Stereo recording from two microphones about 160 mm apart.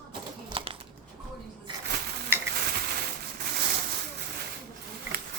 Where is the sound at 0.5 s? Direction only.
35° right (ahead or behind).